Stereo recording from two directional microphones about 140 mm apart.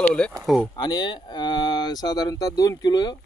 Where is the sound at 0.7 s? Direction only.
30° left (ahead or behind).